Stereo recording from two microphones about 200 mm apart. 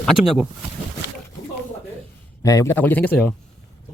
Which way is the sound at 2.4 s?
15° left (ahead or behind).